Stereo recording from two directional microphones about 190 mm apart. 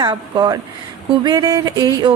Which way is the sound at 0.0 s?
20° right (ahead or behind).